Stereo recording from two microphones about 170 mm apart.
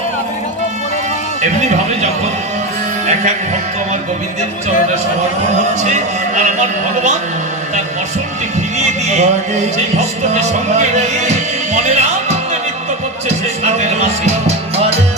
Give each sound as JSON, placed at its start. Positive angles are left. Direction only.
{"t": 1.4, "sound": "a man's voice", "side_deg": -40}
{"t": 5.8, "sound": "a man's voice", "side_deg": -45}
{"t": 8.8, "sound": "a man's voice", "side_deg": -40}
{"t": 10.3, "sound": "speech", "side_deg": -40}
{"t": 11.7, "sound": "music", "side_deg": -40}